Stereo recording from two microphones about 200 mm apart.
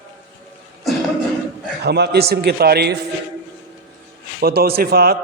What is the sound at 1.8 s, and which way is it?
A man's voice, 55° right (ahead or behind).